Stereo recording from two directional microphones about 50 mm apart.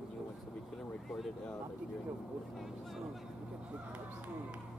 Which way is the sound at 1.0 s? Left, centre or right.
Centre.